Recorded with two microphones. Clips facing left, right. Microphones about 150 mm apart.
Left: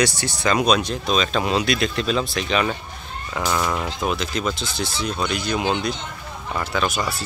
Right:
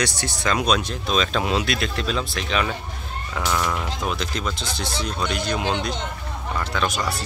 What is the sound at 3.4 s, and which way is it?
Speech, 15° left (ahead or behind).